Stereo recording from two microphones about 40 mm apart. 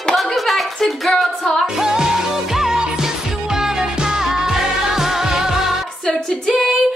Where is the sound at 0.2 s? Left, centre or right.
Centre.